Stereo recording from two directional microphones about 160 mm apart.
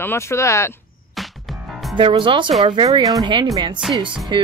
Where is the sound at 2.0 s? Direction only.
30° right (ahead or behind).